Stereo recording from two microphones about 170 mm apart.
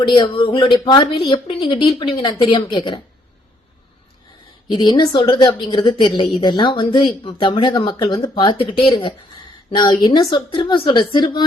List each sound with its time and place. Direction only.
0.0 s speech: 25° left (ahead or behind)
4.7 s speech: 25° left (ahead or behind)